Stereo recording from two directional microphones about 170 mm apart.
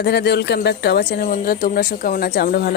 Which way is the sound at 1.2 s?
60° left (ahead or behind).